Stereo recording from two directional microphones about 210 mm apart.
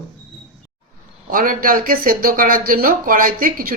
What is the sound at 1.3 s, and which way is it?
Speech, 40° right (ahead or behind).